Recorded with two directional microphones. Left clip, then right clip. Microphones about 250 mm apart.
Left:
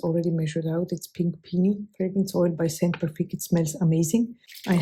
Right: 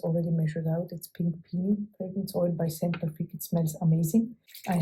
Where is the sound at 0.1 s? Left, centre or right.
Left.